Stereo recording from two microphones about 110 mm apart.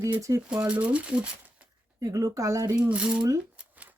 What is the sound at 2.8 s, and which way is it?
Speech, 10° right (ahead or behind).